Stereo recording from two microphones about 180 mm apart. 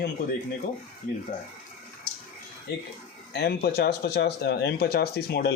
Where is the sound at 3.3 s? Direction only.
65° left (ahead or behind).